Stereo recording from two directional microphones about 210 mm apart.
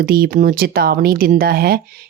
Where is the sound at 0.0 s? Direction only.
45° right (ahead or behind).